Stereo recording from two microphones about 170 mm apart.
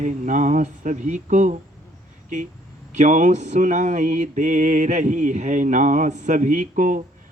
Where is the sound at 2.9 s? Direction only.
45° right (ahead or behind).